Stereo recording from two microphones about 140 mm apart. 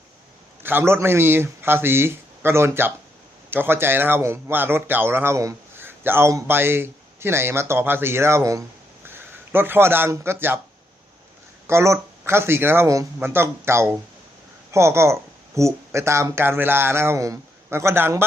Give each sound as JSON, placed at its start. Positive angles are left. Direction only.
{"t": 0.6, "sound": "a man's voice", "side_deg": -15}
{"t": 11.7, "sound": "a man's voice", "side_deg": -20}